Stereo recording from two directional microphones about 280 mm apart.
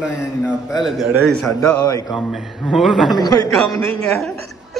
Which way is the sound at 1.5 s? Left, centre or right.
Right.